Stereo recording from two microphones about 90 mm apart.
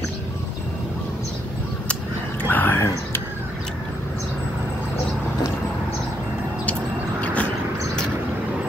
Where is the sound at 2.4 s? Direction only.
20° left (ahead or behind).